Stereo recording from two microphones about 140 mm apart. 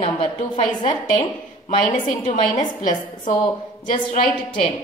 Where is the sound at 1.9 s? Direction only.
60° left (ahead or behind).